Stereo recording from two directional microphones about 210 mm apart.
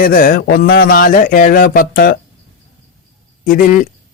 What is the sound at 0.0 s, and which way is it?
A man's voice, 45° left (ahead or behind).